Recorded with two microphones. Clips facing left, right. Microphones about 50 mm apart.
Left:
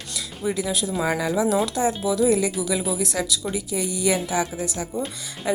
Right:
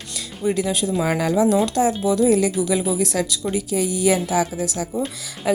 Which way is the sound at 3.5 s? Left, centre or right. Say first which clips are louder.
Right 5 dB; right.